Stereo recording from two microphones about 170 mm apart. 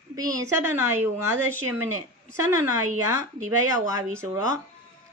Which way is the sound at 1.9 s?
15° right (ahead or behind).